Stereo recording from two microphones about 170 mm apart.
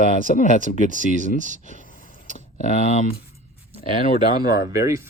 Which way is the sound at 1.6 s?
50° left (ahead or behind).